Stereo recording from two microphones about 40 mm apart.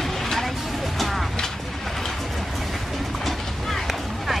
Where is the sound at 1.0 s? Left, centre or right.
Centre.